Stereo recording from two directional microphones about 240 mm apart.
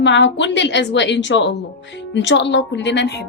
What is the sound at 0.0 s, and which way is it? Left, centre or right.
A woman's voice, left.